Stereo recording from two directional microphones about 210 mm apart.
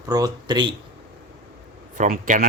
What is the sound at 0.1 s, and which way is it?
Speech, 20° right (ahead or behind).